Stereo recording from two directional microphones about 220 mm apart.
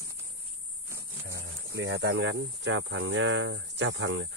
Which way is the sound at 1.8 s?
50° right (ahead or behind).